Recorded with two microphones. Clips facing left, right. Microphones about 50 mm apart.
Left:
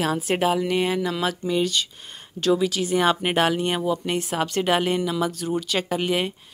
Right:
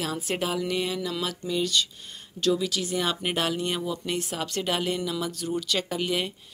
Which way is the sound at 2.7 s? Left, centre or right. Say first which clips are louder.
Left 7 dB; left.